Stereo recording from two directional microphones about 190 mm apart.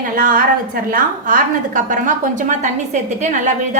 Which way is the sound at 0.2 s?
45° right (ahead or behind).